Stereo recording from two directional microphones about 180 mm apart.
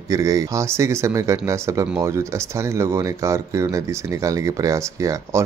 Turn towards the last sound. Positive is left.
turn(degrees=-15)  # may be behind; listen again after turning